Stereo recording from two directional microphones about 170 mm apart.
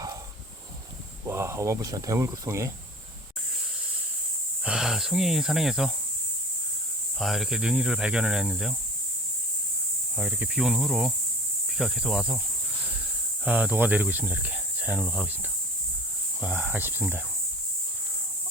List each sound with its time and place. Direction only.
1.3 s speech: 15° right (ahead or behind)
4.6 s speech: 5° right (ahead or behind)
7.2 s speech: centre (ahead or behind)
10.2 s speech: 5° right (ahead or behind)
13.4 s speech: 10° right (ahead or behind)
16.4 s speech: 10° right (ahead or behind)